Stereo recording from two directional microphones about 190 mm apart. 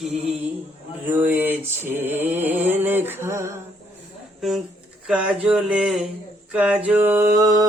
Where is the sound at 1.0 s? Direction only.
10° right (ahead or behind).